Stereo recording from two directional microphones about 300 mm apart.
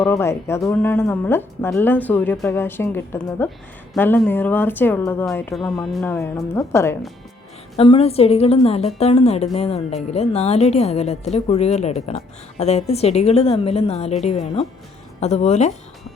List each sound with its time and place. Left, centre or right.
0.1 s speech: centre
7.8 s speech: centre